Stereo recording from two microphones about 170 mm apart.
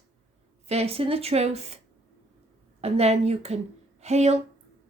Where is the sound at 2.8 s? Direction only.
40° right (ahead or behind).